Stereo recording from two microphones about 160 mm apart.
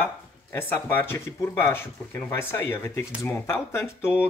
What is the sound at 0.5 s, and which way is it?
Speech, 15° left (ahead or behind).